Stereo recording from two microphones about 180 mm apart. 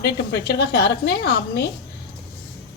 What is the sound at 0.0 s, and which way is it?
A woman's voice, 65° left (ahead or behind).